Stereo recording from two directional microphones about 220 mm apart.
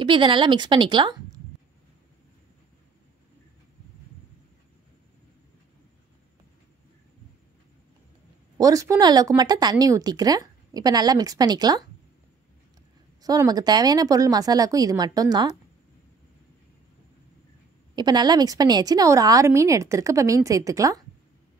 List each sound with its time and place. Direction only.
0.0 s a woman's voice: 20° right (ahead or behind)
8.5 s a woman's voice: 15° right (ahead or behind)
13.2 s a woman's voice: 15° right (ahead or behind)
17.9 s a woman's voice: 20° right (ahead or behind)